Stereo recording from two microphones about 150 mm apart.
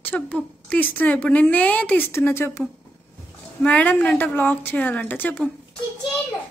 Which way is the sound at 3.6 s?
10° left (ahead or behind).